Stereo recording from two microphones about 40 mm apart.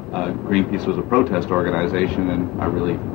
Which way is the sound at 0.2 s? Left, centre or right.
Centre.